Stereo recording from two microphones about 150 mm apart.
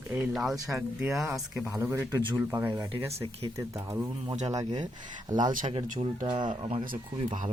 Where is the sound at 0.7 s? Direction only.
5° right (ahead or behind).